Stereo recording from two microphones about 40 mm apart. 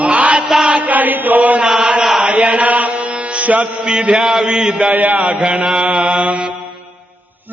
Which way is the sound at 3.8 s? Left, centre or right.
Right.